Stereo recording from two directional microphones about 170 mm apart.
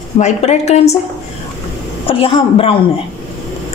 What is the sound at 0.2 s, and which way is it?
Speech, 40° left (ahead or behind).